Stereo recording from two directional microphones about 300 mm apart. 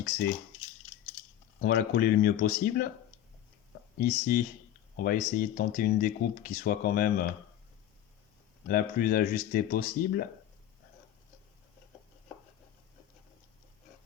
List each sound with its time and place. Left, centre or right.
1.6 s speech: left
3.9 s speech: left
8.6 s speech: left